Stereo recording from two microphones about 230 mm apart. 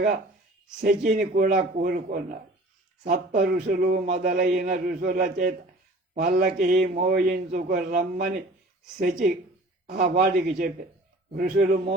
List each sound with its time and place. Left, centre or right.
0.8 s a man's voice: right
9.9 s a man's voice: right